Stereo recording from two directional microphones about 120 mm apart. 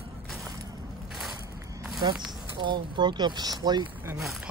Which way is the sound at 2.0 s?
35° right (ahead or behind).